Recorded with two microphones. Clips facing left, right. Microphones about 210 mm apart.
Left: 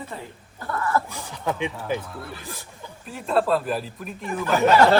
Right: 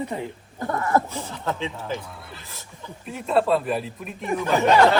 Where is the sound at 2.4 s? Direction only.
15° left (ahead or behind).